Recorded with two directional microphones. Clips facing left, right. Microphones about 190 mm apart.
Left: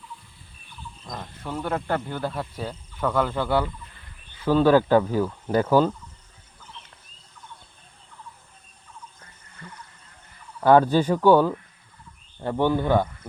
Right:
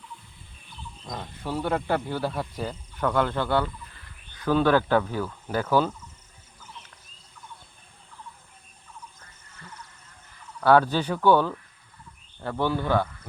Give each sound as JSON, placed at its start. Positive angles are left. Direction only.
{"t": 1.0, "sound": "speech", "side_deg": -5}
{"t": 10.6, "sound": "speech", "side_deg": 15}